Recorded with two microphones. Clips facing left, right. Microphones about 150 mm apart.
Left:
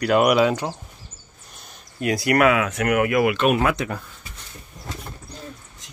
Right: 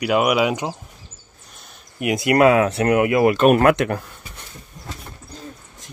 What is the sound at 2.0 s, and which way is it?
Speech, 20° right (ahead or behind).